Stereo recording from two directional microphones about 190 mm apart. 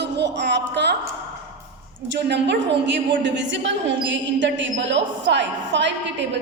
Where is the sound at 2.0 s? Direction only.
65° right (ahead or behind).